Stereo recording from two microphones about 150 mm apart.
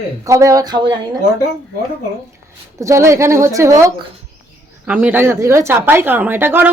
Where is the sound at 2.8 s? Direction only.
20° right (ahead or behind).